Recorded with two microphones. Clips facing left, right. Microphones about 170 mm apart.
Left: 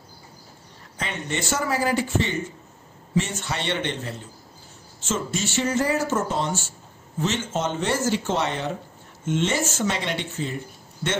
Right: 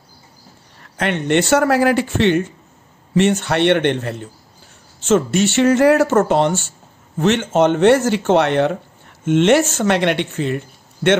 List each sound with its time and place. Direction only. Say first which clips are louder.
0.9 s speech: right 13 dB; 70° right (ahead or behind)